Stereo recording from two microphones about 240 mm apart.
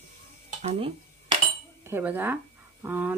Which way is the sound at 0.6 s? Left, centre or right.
Right.